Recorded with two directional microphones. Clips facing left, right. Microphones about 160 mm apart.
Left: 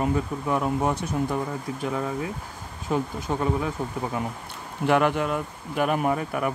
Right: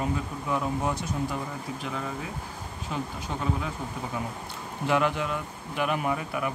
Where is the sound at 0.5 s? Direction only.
55° left (ahead or behind).